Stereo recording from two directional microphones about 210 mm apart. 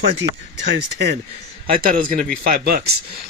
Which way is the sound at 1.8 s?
40° right (ahead or behind).